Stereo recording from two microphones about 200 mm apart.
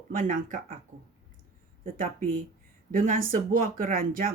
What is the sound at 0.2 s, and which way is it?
Speech, 40° right (ahead or behind).